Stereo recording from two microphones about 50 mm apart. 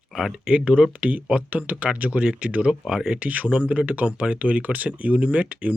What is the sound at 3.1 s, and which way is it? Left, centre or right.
Speech, right.